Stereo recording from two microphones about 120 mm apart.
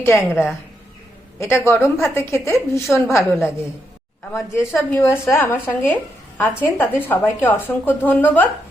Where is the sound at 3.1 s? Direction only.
Centre (ahead or behind).